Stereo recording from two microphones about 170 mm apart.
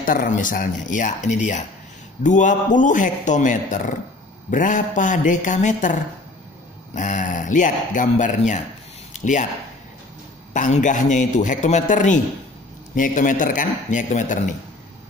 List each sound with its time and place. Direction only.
0.0 s a man's voice: 55° left (ahead or behind)
7.0 s a man's voice: 45° left (ahead or behind)
10.5 s a man's voice: 45° left (ahead or behind)